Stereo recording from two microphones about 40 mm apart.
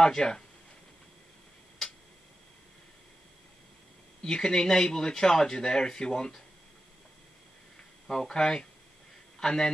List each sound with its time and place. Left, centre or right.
0.0 s speech: centre
4.2 s speech: centre
8.1 s a man's voice: centre